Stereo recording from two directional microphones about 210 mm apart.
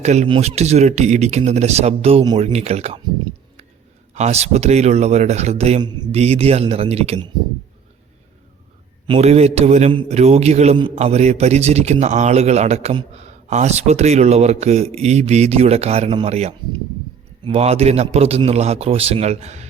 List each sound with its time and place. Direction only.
0.0 s a man's voice: 30° right (ahead or behind)
4.1 s a man's voice: 30° right (ahead or behind)
9.0 s a man's voice: 30° right (ahead or behind)